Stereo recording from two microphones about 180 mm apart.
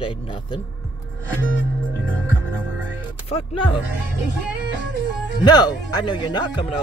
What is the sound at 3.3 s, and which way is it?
Speech, 30° left (ahead or behind).